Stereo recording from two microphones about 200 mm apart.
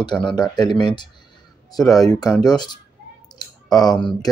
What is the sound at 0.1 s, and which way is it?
Speech, centre (ahead or behind).